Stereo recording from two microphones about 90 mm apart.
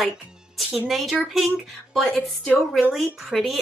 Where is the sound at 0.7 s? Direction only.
Centre (ahead or behind).